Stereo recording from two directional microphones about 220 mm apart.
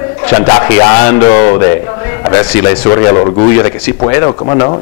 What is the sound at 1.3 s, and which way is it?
Speech, 30° left (ahead or behind).